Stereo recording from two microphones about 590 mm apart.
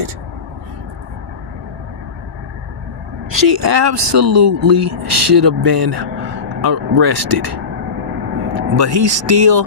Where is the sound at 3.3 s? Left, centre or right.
Right.